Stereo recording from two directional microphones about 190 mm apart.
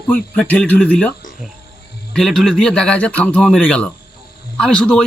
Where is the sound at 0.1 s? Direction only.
10° left (ahead or behind).